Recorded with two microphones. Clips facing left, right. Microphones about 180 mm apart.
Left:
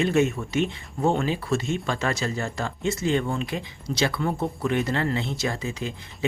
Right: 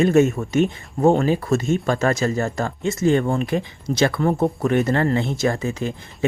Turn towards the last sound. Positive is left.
turn(degrees=-50)  # may be behind; listen again after turning